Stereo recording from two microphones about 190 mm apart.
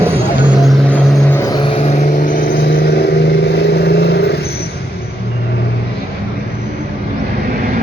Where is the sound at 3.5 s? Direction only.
55° left (ahead or behind).